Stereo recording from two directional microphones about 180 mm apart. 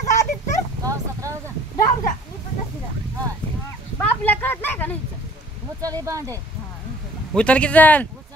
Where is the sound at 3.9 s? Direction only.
10° left (ahead or behind).